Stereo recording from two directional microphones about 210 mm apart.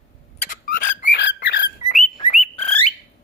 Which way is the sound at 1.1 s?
55° left (ahead or behind).